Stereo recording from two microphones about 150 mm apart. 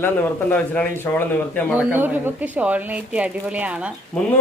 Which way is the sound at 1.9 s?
15° right (ahead or behind).